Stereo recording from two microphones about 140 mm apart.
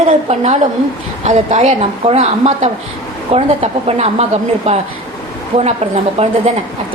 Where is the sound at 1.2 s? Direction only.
55° right (ahead or behind).